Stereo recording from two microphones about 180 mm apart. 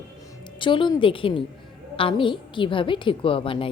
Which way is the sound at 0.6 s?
25° left (ahead or behind).